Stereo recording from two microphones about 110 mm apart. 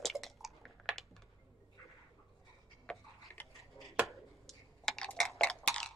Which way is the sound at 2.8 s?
15° left (ahead or behind).